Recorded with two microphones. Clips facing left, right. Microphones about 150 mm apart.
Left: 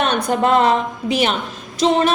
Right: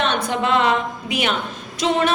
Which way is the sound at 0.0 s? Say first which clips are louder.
Left 4 dB; 45° left (ahead or behind).